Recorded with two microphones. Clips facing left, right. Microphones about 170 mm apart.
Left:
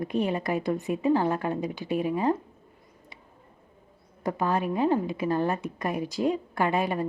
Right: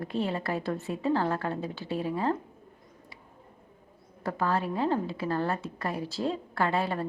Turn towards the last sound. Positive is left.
turn(degrees=15)  # may be behind; listen again after turning